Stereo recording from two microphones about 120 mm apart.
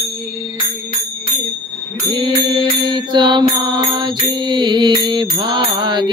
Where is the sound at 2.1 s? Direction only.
40° right (ahead or behind).